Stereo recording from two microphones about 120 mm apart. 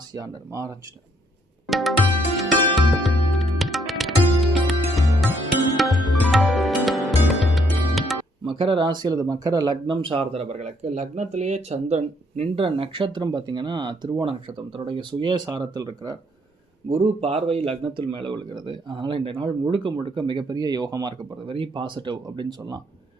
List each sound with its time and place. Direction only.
0.1 s speech: 30° right (ahead or behind)
1.6 s music: centre (ahead or behind)
8.5 s speech: 45° right (ahead or behind)
16.9 s a man's voice: 60° right (ahead or behind); by 22.8 s 35° right (ahead or behind)